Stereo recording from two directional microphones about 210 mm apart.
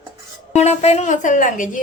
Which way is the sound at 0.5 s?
30° left (ahead or behind).